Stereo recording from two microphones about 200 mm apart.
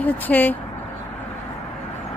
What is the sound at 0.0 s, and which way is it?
Speech, 10° left (ahead or behind).